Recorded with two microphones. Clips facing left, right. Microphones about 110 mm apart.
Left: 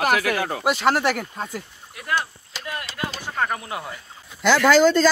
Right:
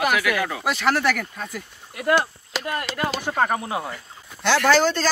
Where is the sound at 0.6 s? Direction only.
20° left (ahead or behind).